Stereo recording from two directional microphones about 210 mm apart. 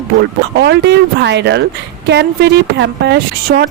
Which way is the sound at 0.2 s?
55° right (ahead or behind).